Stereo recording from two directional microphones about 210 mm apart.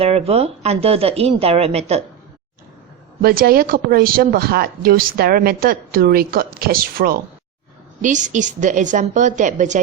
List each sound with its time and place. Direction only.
0.0 s speech: 30° right (ahead or behind)
3.2 s a woman's voice: 45° right (ahead or behind)